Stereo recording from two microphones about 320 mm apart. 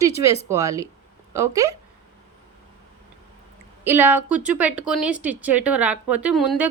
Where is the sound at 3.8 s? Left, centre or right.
Centre.